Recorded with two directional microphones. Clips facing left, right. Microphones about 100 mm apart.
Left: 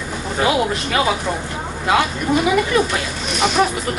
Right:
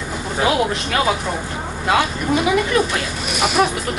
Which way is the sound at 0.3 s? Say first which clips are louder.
Even; centre (ahead or behind).